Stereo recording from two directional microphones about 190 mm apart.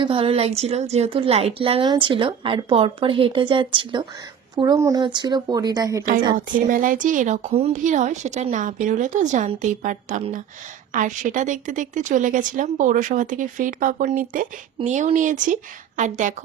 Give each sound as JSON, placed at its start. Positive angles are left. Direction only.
{"t": 0.0, "sound": "a woman's voice", "side_deg": -30}
{"t": 6.7, "sound": "a woman's voice", "side_deg": -45}